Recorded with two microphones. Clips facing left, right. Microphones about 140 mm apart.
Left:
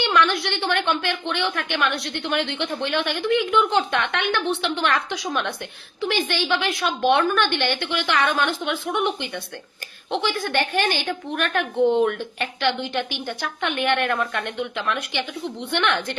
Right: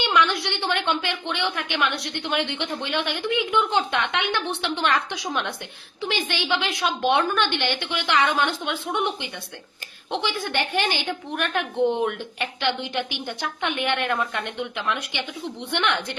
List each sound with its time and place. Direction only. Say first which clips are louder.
0.0 s a woman's voice: left 2 dB; 20° right (ahead or behind)
10.1 s a woman's voice: left 3 dB; 20° right (ahead or behind)